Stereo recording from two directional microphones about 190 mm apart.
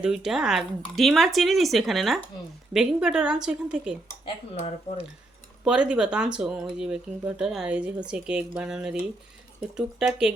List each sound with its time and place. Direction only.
0.0 s speech: 5° right (ahead or behind)
4.5 s speech: 35° left (ahead or behind)
5.6 s speech: 5° right (ahead or behind)